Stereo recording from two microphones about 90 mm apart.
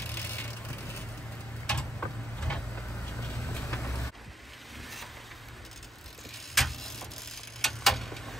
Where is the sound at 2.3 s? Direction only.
15° left (ahead or behind).